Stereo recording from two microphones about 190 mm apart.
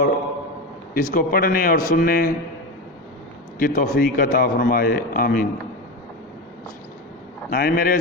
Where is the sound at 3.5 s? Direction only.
50° left (ahead or behind).